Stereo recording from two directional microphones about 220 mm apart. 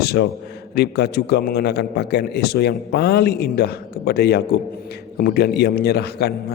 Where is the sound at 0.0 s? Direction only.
45° left (ahead or behind).